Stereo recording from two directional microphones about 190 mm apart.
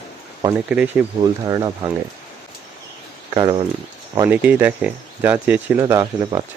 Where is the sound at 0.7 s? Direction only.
5° right (ahead or behind).